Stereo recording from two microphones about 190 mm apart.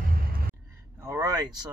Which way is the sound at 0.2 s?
50° right (ahead or behind).